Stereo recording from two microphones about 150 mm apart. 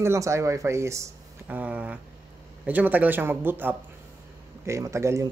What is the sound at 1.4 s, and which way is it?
Speech, 10° right (ahead or behind).